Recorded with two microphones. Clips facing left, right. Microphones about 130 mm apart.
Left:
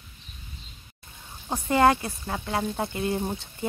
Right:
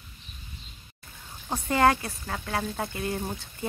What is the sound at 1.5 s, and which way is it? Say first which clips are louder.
Speech: left 2 dB; 20° left (ahead or behind).